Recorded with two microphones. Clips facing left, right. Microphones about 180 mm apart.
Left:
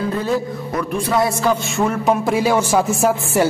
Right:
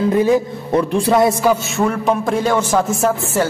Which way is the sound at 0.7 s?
30° right (ahead or behind).